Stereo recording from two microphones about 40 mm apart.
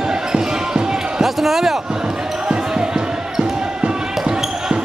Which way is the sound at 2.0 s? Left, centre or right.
Right.